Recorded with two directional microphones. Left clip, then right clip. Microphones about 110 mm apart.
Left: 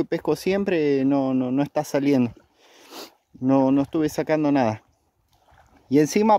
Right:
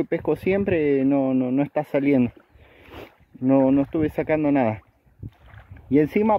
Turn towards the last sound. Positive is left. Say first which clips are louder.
# left 1 dB
turn(degrees=35)  # may be behind; listen again after turning